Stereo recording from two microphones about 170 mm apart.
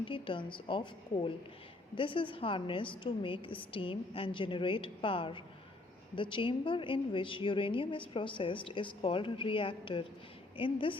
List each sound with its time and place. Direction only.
0.0 s a woman's voice: 30° left (ahead or behind)